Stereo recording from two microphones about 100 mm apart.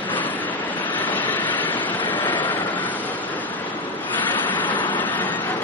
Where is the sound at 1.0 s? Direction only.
15° left (ahead or behind).